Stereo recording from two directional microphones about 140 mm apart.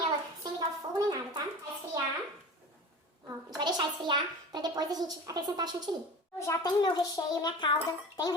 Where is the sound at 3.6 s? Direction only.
30° right (ahead or behind).